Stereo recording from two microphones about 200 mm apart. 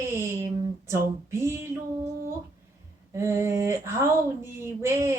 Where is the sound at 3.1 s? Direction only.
15° right (ahead or behind).